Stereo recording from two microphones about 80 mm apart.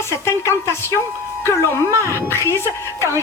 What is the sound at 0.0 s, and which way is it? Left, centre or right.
A child's voice, left.